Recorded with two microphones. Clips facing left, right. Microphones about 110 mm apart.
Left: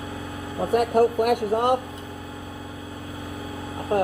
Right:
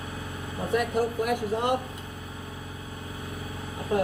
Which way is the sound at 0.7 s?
50° left (ahead or behind).